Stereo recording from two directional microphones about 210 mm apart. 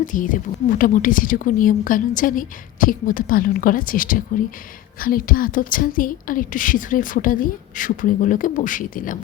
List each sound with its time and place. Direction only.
0.0 s a woman's voice: 40° left (ahead or behind)